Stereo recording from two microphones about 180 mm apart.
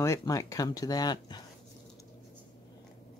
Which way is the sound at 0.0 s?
15° left (ahead or behind).